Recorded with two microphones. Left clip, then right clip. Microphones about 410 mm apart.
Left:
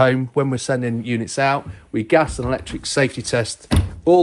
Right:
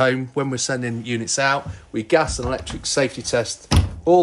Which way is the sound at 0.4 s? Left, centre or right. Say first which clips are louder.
Left 3 dB; centre.